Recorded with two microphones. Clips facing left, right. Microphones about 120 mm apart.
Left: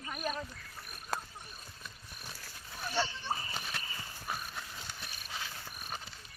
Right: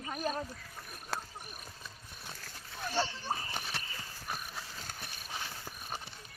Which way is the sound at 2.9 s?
35° right (ahead or behind).